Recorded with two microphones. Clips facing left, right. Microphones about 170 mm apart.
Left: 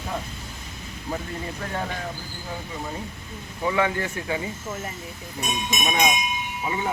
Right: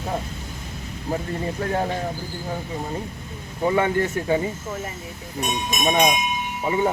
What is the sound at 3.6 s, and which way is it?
Speech, 35° right (ahead or behind).